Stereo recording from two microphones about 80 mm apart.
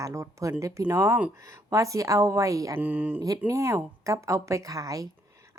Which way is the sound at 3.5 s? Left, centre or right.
Right.